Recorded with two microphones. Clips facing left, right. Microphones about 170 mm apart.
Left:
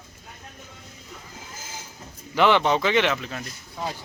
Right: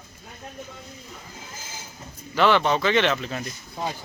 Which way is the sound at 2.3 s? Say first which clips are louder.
Even; 15° left (ahead or behind).